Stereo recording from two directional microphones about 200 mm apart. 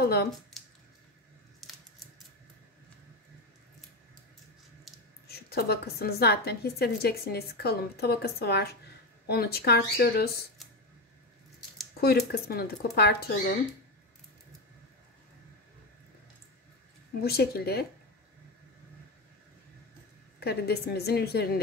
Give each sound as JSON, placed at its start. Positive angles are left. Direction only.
{"t": 0.0, "sound": "speech", "side_deg": 50}
{"t": 5.3, "sound": "a woman's voice", "side_deg": 50}
{"t": 12.0, "sound": "a woman's voice", "side_deg": 50}
{"t": 17.2, "sound": "a woman's voice", "side_deg": 50}
{"t": 20.3, "sound": "a woman's voice", "side_deg": 55}